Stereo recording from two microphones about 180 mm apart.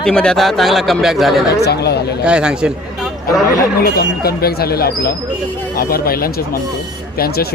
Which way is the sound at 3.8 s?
55° left (ahead or behind).